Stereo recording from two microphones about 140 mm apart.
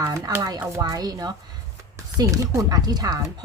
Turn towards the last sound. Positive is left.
turn(degrees=-30)  # may be behind; listen again after turning